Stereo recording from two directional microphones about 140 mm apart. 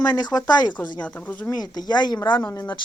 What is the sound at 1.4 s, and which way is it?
Speech, 30° left (ahead or behind).